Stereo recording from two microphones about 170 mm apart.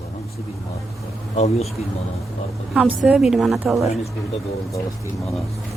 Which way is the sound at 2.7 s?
5° right (ahead or behind).